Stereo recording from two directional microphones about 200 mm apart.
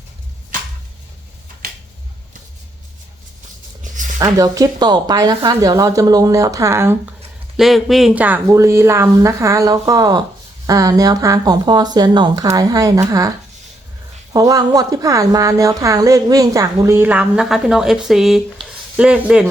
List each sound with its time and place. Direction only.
4.2 s a woman's voice: 15° right (ahead or behind)
7.5 s a woman's voice: centre (ahead or behind); by 13.3 s 15° right (ahead or behind)
14.3 s a woman's voice: 20° right (ahead or behind)